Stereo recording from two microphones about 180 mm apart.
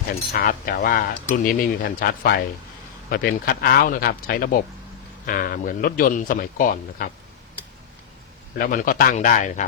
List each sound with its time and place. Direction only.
0.3 s speech: 55° left (ahead or behind)
8.5 s speech: 50° left (ahead or behind)